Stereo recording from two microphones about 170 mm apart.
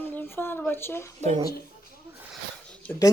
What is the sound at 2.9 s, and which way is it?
Speech, 10° left (ahead or behind).